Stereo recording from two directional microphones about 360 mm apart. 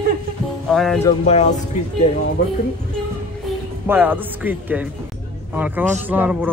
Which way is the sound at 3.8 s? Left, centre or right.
Centre.